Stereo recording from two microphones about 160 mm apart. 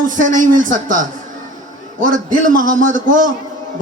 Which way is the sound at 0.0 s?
55° right (ahead or behind).